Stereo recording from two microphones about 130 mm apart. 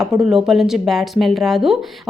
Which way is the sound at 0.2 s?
Centre (ahead or behind).